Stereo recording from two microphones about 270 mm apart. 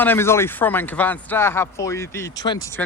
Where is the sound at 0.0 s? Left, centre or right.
Centre.